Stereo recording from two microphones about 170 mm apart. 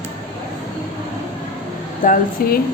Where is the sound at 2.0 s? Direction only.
55° left (ahead or behind).